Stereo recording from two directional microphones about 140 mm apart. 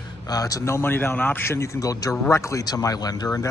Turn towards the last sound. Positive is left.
turn(degrees=25)  # may be behind; listen again after turning